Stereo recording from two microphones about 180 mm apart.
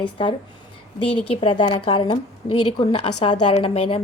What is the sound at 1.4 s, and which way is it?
A woman's voice, 30° left (ahead or behind).